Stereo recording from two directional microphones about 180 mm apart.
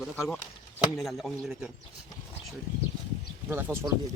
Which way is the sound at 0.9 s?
Centre (ahead or behind).